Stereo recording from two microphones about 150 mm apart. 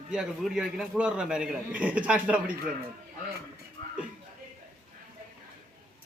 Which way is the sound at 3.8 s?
35° left (ahead or behind).